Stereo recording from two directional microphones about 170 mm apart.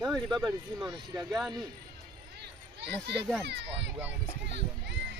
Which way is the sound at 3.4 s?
90° right.